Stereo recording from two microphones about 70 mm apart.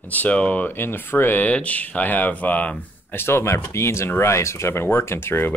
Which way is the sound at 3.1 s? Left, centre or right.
Left.